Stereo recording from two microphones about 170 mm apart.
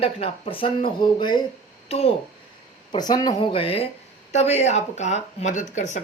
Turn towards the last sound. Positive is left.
turn(degrees=45)  # may be behind; listen again after turning